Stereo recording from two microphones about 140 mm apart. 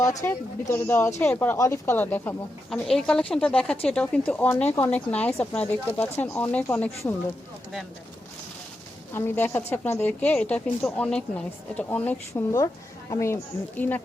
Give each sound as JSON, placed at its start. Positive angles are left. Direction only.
{"t": 0.0, "sound": "a woman's voice", "side_deg": 25}
{"t": 9.1, "sound": "a woman's voice", "side_deg": 15}
{"t": 12.3, "sound": "a woman's voice", "side_deg": 25}